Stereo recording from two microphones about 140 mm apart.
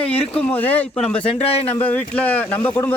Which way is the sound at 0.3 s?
10° left (ahead or behind).